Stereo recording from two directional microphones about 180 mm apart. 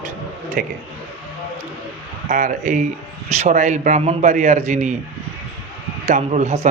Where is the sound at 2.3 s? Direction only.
45° right (ahead or behind).